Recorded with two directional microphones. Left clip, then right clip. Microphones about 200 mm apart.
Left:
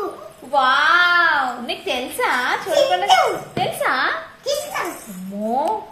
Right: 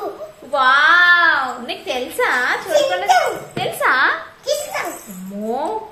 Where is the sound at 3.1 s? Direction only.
20° right (ahead or behind).